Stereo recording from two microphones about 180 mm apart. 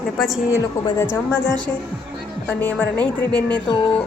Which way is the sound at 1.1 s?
15° left (ahead or behind).